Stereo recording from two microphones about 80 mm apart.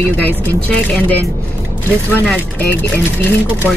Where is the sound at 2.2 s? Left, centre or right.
Centre.